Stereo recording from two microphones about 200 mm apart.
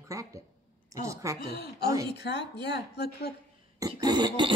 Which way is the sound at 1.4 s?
50° left (ahead or behind).